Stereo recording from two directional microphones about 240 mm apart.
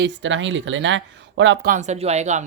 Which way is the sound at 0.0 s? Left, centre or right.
Right.